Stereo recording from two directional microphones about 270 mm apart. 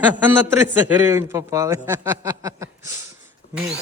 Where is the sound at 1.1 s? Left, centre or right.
Centre.